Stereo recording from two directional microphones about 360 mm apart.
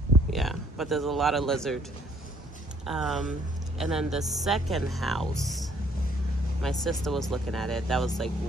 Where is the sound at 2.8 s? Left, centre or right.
Centre.